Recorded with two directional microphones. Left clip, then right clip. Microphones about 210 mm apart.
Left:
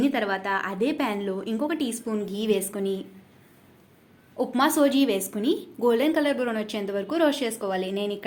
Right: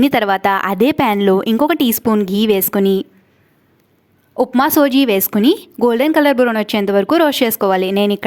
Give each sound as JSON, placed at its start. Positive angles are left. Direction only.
{"t": 0.0, "sound": "speech", "side_deg": -50}
{"t": 4.4, "sound": "speech", "side_deg": -45}